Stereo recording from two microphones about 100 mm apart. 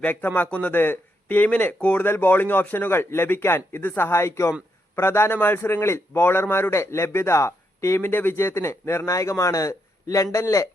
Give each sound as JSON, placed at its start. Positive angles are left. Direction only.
{"t": 0.0, "sound": "a man's voice", "side_deg": 15}